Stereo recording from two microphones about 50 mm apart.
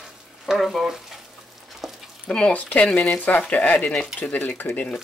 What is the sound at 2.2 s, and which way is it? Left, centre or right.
Speech, left.